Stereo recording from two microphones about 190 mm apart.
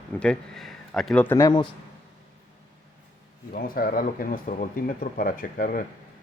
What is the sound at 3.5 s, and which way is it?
Speech, 50° left (ahead or behind).